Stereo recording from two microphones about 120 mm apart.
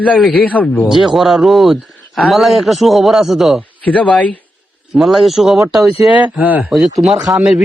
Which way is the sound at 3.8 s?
10° left (ahead or behind).